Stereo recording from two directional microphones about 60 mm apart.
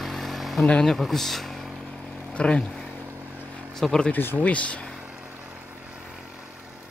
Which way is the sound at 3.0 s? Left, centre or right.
Right.